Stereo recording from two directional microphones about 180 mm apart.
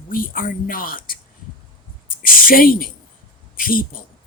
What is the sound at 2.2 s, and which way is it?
Speech, 50° left (ahead or behind).